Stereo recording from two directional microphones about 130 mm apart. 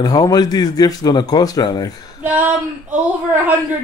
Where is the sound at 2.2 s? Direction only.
15° right (ahead or behind).